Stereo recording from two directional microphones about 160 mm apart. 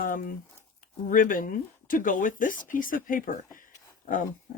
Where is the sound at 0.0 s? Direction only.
60° left (ahead or behind).